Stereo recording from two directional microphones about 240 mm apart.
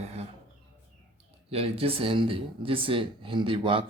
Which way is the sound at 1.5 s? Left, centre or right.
Right.